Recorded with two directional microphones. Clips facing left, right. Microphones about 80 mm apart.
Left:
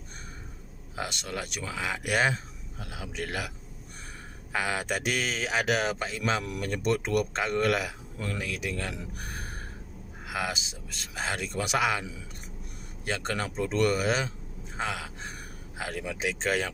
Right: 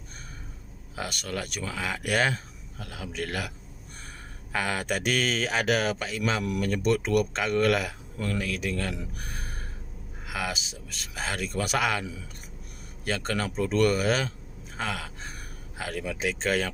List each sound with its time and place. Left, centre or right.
0.9 s speech: left
9.1 s a sound: left
10.2 s speech: left